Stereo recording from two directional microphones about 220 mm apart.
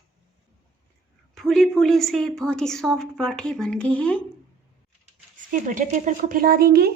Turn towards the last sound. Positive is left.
turn(degrees=-45)  # may be behind; listen again after turning